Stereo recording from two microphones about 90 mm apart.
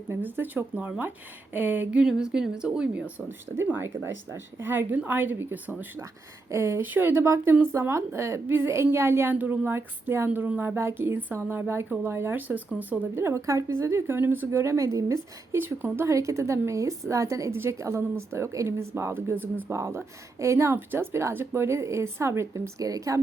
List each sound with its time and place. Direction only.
0.1 s a woman's voice: 25° right (ahead or behind)
3.2 s a woman's voice: 25° right (ahead or behind)
13.2 s a woman's voice: 35° right (ahead or behind)
15.5 s a woman's voice: 25° right (ahead or behind)
16.0 s a woman's voice: 35° right (ahead or behind)